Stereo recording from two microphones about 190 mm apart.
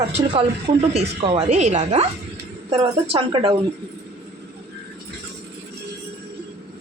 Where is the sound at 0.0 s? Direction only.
30° right (ahead or behind).